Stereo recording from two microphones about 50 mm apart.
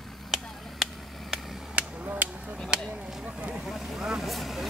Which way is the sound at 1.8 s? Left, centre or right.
Right.